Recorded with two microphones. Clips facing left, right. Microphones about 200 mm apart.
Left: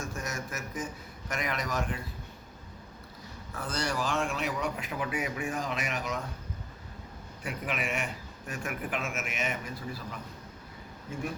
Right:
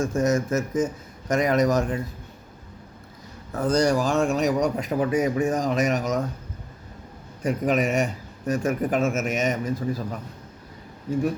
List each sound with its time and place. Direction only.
0.0 s speech: 45° right (ahead or behind)
3.5 s a man's voice: 40° right (ahead or behind)
7.4 s a man's voice: 40° right (ahead or behind)